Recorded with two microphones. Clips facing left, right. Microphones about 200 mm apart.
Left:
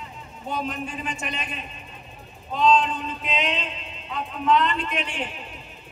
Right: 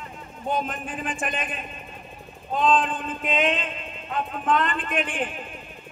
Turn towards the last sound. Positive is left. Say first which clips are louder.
# right 3 dB
turn(degrees=-50)  # may be behind; listen again after turning